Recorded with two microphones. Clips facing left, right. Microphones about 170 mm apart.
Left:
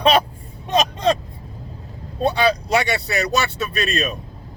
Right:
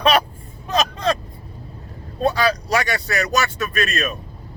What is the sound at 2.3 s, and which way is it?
Speech, 25° left (ahead or behind).